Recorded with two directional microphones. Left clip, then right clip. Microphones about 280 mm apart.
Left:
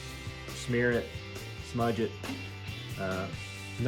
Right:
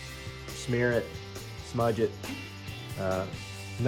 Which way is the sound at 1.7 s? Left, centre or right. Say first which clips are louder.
Right 3 dB; centre.